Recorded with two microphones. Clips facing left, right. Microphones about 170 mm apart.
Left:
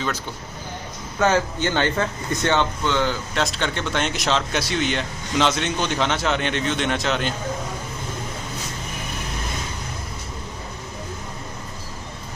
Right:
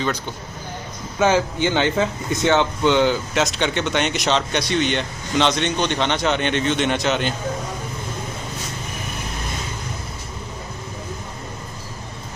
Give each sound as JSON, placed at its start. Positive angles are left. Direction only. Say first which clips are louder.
{"t": 1.2, "sound": "speech", "louder": "right 2 dB", "side_deg": -10}
{"t": 3.3, "sound": "speech", "louder": "right 3 dB", "side_deg": 0}